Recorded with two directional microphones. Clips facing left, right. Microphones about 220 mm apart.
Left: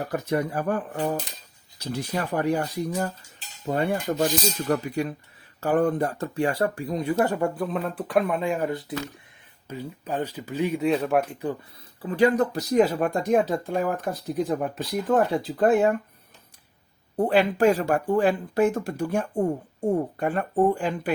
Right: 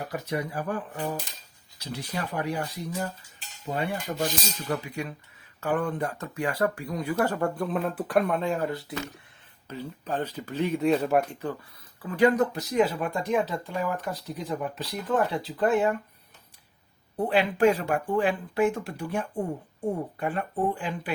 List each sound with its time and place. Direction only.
0.1 s speech: 50° left (ahead or behind); by 7.3 s 25° left (ahead or behind)
7.3 s speech: 5° left (ahead or behind)
8.4 s speech: 15° left (ahead or behind)
12.0 s speech: 30° left (ahead or behind); by 16.0 s 45° left (ahead or behind)
17.2 s speech: 40° left (ahead or behind)